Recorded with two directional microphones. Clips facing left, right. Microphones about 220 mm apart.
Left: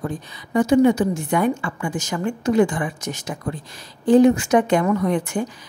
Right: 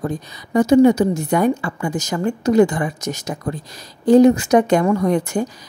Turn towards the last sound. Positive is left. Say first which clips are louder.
# right 3 dB
turn(degrees=-40)  # may be behind; listen again after turning